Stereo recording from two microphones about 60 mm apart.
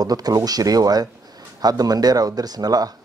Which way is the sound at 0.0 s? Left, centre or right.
Right.